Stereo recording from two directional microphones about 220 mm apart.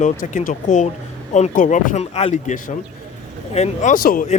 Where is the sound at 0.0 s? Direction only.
35° left (ahead or behind).